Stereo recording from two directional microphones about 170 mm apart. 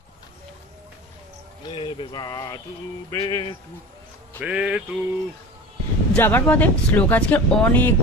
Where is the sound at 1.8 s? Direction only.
25° left (ahead or behind).